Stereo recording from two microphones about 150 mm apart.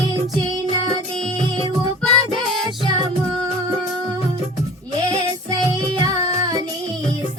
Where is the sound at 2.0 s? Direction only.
Centre (ahead or behind).